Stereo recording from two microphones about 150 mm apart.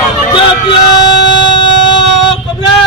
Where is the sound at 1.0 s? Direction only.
30° left (ahead or behind).